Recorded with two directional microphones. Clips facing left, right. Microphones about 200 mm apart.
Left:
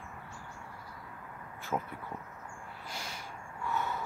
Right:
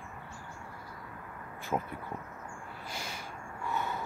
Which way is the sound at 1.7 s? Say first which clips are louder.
Right 2 dB; 10° right (ahead or behind).